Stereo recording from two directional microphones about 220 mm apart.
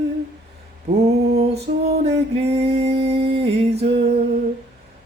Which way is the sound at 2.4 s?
25° right (ahead or behind).